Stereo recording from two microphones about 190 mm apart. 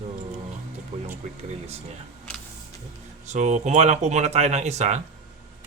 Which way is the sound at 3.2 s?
40° right (ahead or behind).